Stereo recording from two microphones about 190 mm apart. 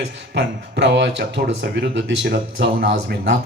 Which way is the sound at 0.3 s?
65° right (ahead or behind).